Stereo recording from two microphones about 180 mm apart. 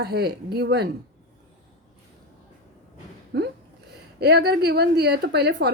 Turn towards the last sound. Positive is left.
turn(degrees=-65)  # may be behind; listen again after turning